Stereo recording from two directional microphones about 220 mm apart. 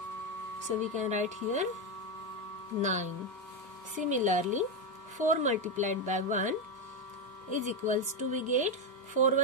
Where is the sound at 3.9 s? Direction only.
35° right (ahead or behind).